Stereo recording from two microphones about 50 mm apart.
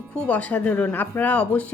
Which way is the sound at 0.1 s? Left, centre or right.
Left.